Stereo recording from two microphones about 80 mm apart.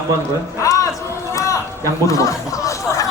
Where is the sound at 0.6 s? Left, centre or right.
Left.